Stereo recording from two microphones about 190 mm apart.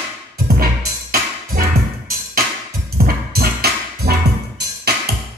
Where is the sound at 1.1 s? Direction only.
50° right (ahead or behind).